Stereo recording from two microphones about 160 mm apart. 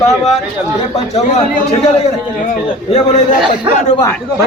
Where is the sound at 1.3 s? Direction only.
45° left (ahead or behind).